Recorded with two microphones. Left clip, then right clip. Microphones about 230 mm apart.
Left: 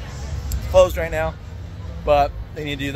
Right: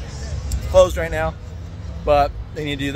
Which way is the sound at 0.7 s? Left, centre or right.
Centre.